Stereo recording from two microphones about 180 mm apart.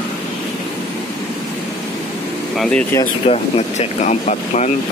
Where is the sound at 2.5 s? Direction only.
Centre (ahead or behind).